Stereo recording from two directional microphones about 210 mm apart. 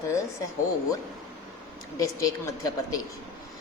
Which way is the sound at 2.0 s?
15° left (ahead or behind).